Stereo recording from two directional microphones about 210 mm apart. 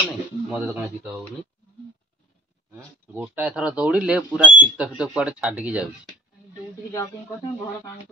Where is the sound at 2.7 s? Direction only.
5° right (ahead or behind).